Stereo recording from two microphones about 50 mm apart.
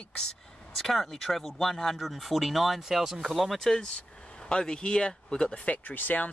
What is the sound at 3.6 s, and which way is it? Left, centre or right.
Speech, centre.